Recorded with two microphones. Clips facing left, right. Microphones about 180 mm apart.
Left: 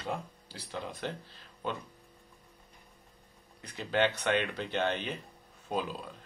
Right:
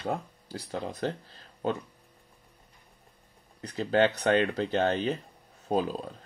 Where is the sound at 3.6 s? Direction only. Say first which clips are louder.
Right 5 dB; 40° right (ahead or behind).